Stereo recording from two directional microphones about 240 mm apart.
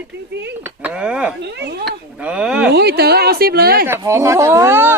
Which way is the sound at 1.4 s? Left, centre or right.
Right.